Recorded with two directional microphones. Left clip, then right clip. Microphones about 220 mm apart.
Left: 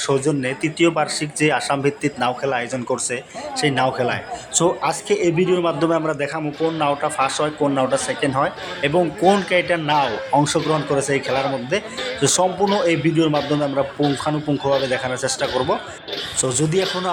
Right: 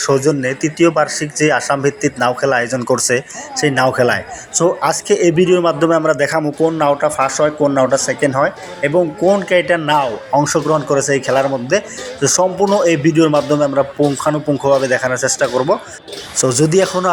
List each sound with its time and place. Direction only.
0.3 s a man's voice: 5° right (ahead or behind)